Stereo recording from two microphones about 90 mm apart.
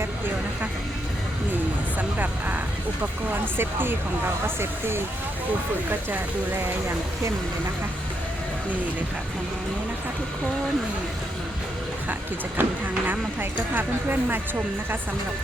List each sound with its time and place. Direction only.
2.0 s vehicle: 20° right (ahead or behind)
3.2 s speech: 25° right (ahead or behind)
12.5 s speech: 20° right (ahead or behind)